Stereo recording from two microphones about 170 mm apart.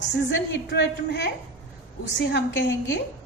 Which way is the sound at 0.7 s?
90° left.